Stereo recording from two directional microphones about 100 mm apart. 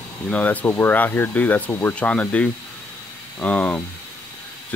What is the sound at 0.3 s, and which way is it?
Speech, 15° left (ahead or behind).